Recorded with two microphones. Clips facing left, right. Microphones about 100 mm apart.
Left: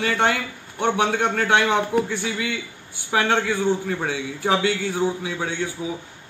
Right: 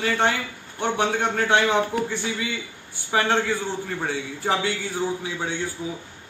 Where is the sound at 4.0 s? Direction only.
Centre (ahead or behind).